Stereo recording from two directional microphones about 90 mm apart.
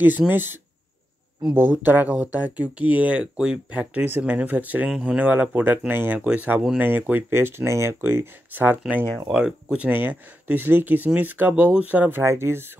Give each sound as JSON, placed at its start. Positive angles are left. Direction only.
{"t": 0.3, "sound": "speech", "side_deg": -25}